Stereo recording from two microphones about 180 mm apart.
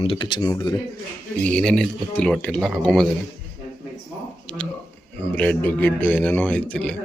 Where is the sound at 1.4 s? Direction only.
5° left (ahead or behind).